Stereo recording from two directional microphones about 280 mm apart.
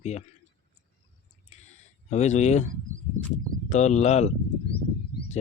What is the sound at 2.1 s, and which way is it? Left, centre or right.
Speech, left.